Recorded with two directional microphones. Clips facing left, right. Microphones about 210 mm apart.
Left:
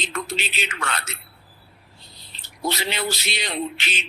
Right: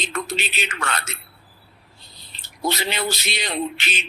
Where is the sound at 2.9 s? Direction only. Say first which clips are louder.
Right 1 dB; 50° right (ahead or behind).